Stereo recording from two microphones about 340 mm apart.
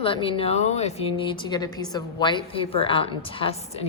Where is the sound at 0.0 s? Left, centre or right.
Centre.